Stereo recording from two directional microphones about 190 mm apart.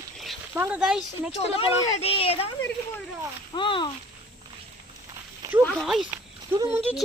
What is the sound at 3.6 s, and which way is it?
Speech, 25° left (ahead or behind).